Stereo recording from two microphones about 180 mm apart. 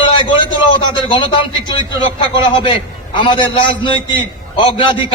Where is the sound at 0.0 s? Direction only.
25° left (ahead or behind).